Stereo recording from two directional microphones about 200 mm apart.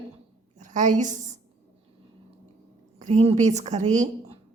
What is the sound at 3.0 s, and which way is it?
A woman's voice, 35° right (ahead or behind).